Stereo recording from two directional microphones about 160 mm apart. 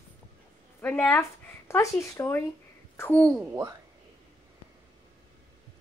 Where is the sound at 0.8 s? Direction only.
10° left (ahead or behind).